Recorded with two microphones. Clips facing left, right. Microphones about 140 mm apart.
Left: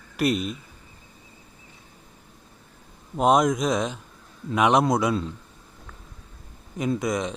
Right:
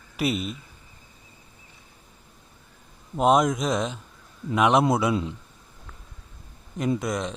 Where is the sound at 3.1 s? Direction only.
Centre (ahead or behind).